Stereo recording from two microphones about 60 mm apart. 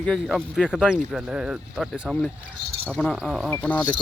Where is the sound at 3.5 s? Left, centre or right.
Left.